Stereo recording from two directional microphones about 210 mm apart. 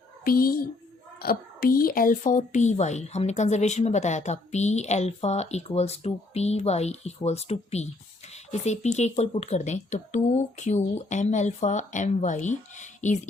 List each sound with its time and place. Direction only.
0.3 s a child's voice: 45° left (ahead or behind)